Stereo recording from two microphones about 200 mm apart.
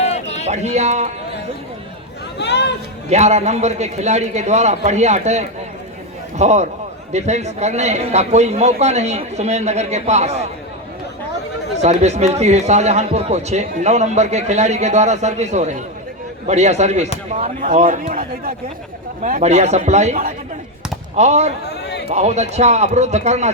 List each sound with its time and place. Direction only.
0.0 s a sound: 35° left (ahead or behind)
0.4 s speech: 35° right (ahead or behind)
2.4 s speech: 60° left (ahead or behind)
3.1 s speech: 35° right (ahead or behind)
11.8 s speech: 35° right (ahead or behind)
21.6 s a sound: 55° left (ahead or behind)
22.1 s speech: 35° right (ahead or behind)